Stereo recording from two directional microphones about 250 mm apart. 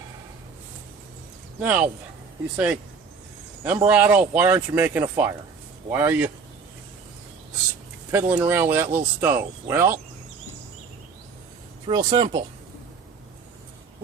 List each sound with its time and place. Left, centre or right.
1.5 s speech: centre
3.6 s speech: centre
8.1 s speech: centre
11.9 s speech: centre